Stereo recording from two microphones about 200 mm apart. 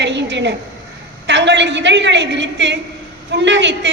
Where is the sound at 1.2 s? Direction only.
60° right (ahead or behind).